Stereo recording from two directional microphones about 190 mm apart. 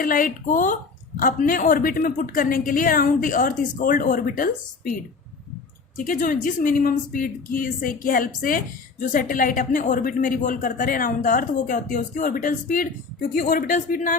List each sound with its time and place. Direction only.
0.0 s a woman's voice: 45° left (ahead or behind)
6.1 s a woman's voice: 45° left (ahead or behind)